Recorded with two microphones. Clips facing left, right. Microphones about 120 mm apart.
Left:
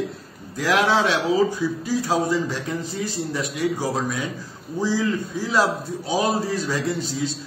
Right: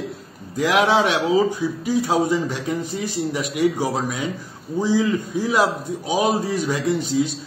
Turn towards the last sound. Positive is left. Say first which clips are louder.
# right 5 dB
turn(degrees=-15)  # may be behind; listen again after turning